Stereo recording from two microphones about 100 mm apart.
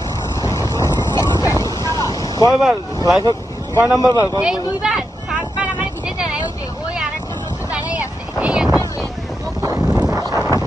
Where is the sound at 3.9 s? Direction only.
35° left (ahead or behind).